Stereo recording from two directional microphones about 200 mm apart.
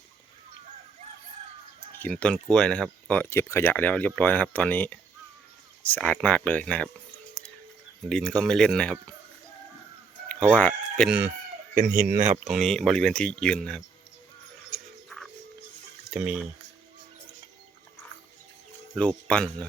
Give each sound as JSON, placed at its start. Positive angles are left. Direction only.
{"t": 2.0, "sound": "speech", "side_deg": 5}
{"t": 8.1, "sound": "speech", "side_deg": 5}
{"t": 10.2, "sound": "speech", "side_deg": 5}
{"t": 11.7, "sound": "speech", "side_deg": -45}
{"t": 12.5, "sound": "speech", "side_deg": 0}
{"t": 16.1, "sound": "speech", "side_deg": -5}
{"t": 18.9, "sound": "speech", "side_deg": 5}